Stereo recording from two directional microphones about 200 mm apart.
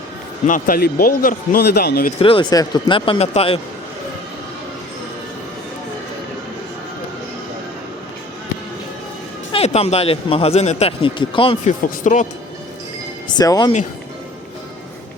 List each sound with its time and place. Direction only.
0.4 s a man's voice: 45° left (ahead or behind)
2.1 s speech: 25° left (ahead or behind)
9.5 s speech: 30° left (ahead or behind)
12.0 s speech: 35° left (ahead or behind)
13.2 s speech: 20° left (ahead or behind)